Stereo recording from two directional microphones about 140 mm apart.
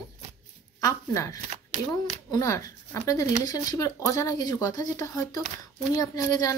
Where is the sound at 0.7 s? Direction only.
20° left (ahead or behind).